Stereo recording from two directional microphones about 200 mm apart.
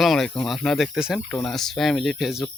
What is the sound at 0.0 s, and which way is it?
Speech, centre (ahead or behind).